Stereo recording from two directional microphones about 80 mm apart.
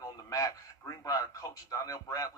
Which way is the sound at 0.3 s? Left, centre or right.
Left.